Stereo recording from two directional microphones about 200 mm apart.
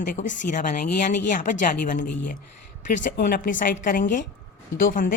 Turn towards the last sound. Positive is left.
turn(degrees=45)  # may be behind; listen again after turning